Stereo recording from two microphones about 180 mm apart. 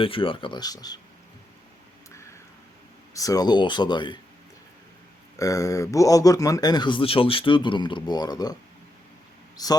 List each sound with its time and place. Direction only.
0.0 s speech: 30° left (ahead or behind)
3.2 s speech: 20° left (ahead or behind)
5.4 s speech: 20° left (ahead or behind)
9.6 s speech: 20° left (ahead or behind)